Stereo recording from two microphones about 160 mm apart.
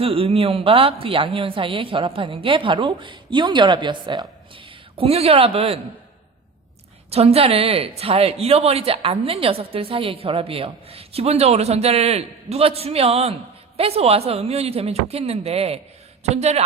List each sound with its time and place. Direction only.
0.0 s a woman's voice: 35° right (ahead or behind)
7.1 s a woman's voice: 40° right (ahead or behind)